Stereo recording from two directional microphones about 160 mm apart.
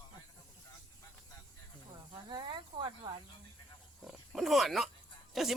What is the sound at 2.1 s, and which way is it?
Snake, 30° right (ahead or behind).